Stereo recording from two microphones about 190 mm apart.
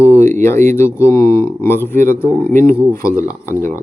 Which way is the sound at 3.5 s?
45° right (ahead or behind).